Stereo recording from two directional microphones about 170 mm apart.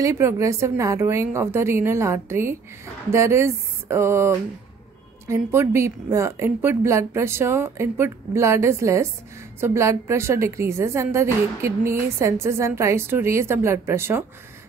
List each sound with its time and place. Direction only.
0.0 s a woman's voice: 15° right (ahead or behind)